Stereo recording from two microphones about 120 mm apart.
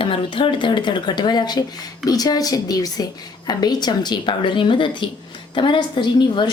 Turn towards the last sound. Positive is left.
turn(degrees=40)  # may be behind; listen again after turning